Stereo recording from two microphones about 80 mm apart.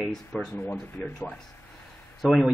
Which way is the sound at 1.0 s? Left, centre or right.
Centre.